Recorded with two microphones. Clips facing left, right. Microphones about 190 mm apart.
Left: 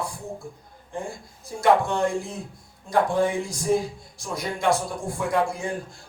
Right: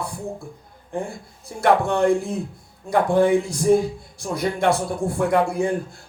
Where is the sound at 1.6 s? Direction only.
60° right (ahead or behind).